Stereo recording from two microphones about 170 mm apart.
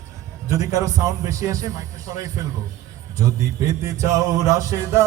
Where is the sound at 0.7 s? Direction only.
20° right (ahead or behind).